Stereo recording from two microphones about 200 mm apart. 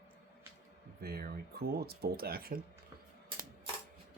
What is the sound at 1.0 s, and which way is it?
Speech, 50° right (ahead or behind).